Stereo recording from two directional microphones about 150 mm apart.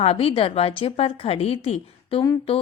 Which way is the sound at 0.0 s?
40° left (ahead or behind).